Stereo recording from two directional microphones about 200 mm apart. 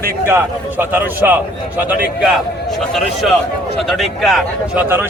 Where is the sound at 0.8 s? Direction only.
10° right (ahead or behind).